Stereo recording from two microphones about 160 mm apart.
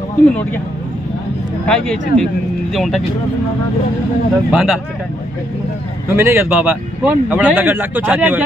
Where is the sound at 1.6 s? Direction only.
5° left (ahead or behind).